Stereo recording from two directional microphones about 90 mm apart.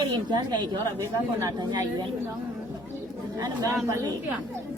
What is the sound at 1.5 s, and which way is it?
Speech, 50° right (ahead or behind).